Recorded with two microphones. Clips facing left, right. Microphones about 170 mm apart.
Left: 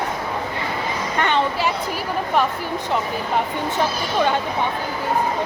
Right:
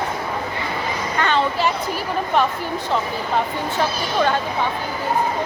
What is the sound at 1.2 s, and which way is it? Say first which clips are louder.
Speech: right 1 dB; 20° left (ahead or behind).